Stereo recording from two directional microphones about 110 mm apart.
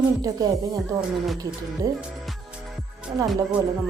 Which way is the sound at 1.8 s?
30° right (ahead or behind).